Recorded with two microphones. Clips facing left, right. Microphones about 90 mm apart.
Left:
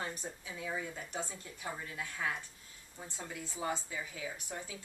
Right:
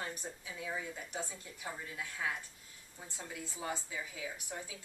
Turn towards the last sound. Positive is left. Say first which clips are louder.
# left 1 dB
turn(degrees=-5)  # may be behind; listen again after turning